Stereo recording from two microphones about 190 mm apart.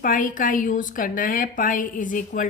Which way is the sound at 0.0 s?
45° left (ahead or behind).